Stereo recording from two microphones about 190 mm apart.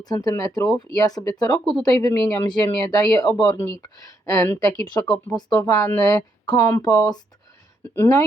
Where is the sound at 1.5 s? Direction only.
5° left (ahead or behind).